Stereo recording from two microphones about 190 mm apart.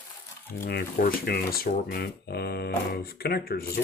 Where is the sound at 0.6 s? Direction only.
55° left (ahead or behind).